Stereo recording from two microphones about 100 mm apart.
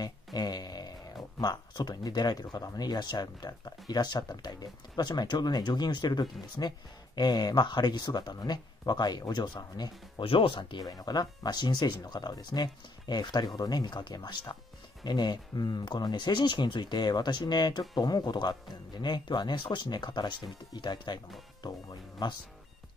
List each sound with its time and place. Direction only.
0.0 s a sound: 40° left (ahead or behind)
1.4 s speech: 45° left (ahead or behind)
10.2 s speech: 65° left (ahead or behind); by 22.3 s 40° left (ahead or behind)